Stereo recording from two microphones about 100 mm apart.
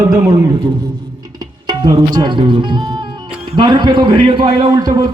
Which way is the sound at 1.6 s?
45° right (ahead or behind).